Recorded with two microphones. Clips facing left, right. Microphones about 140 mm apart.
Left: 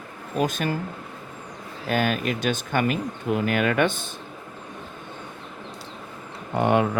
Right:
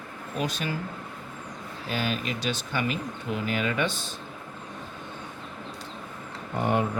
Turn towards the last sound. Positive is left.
turn(degrees=80)